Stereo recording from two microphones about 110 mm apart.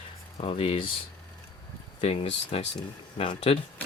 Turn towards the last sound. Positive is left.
turn(degrees=55)  # may be behind; listen again after turning